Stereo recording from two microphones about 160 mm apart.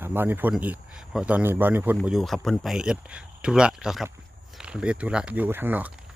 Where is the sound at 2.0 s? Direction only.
Centre (ahead or behind).